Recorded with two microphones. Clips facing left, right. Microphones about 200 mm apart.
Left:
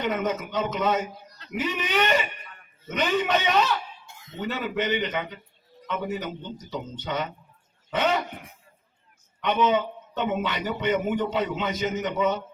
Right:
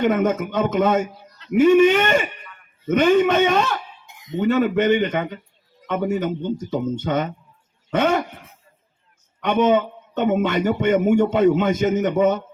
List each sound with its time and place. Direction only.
0.0 s a man's voice: 50° right (ahead or behind)
4.0 s a sound: 15° right (ahead or behind)
4.4 s a man's voice: 50° right (ahead or behind)
9.4 s a man's voice: 50° right (ahead or behind)